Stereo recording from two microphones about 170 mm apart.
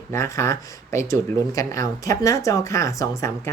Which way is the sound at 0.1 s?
15° left (ahead or behind).